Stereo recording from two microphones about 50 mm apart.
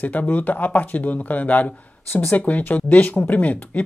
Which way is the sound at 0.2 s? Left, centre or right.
Left.